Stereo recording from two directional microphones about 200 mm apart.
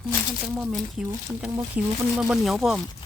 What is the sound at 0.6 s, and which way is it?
Speech, centre (ahead or behind).